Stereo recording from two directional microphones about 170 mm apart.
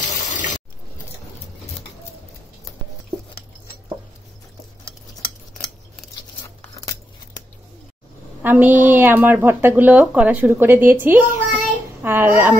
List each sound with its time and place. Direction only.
0.0 s water: 50° left (ahead or behind)
8.4 s a woman's voice: 10° right (ahead or behind)